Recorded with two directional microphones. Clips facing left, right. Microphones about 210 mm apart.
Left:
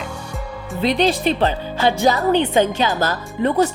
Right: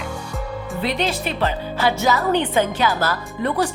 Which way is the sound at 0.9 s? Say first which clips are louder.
Left 6 dB; 30° left (ahead or behind).